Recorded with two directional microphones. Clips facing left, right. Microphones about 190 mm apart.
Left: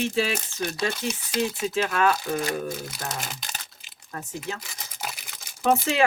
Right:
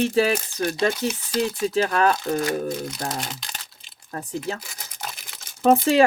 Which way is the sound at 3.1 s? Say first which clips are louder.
Right 3 dB; 5° left (ahead or behind).